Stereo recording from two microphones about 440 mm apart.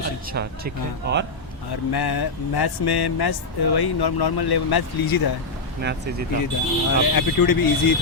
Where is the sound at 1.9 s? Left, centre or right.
Left.